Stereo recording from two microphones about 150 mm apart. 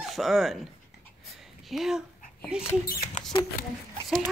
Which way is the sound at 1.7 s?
5° right (ahead or behind).